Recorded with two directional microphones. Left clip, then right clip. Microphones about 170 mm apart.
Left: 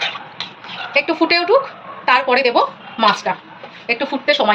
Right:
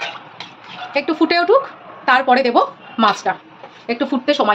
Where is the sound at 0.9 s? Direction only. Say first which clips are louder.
Left 1 dB; 70° right (ahead or behind).